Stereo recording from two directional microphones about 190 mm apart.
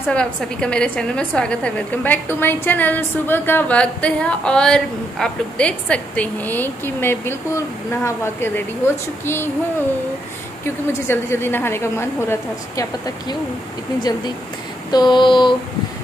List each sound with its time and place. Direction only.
0.1 s a woman's voice: 5° left (ahead or behind)
10.9 s a woman's voice: 15° left (ahead or behind)
14.1 s a sound: 20° left (ahead or behind)